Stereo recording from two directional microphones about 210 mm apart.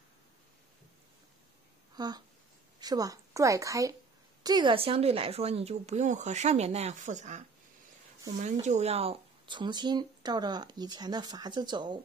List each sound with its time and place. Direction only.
2.0 s a woman's voice: 20° right (ahead or behind)